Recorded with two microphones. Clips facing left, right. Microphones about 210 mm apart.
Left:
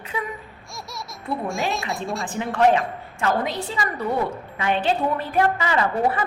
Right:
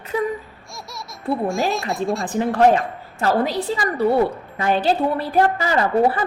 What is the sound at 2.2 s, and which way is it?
A woman's voice, 40° right (ahead or behind).